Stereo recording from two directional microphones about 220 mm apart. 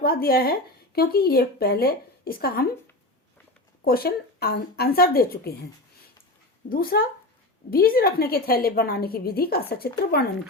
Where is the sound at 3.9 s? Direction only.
45° left (ahead or behind).